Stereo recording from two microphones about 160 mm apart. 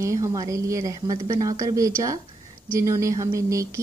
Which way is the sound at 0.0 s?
20° right (ahead or behind).